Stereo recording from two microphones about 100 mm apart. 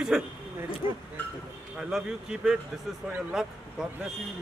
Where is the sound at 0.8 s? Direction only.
35° right (ahead or behind).